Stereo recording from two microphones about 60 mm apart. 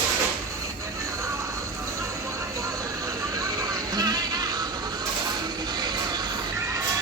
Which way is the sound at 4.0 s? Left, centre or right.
Right.